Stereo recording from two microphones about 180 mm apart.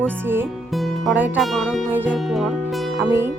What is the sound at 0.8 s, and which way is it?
Music, 5° right (ahead or behind).